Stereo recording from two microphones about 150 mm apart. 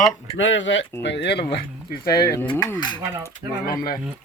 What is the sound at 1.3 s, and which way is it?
Speech, 90° left.